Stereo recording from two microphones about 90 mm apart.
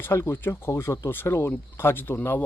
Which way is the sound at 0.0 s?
25° left (ahead or behind).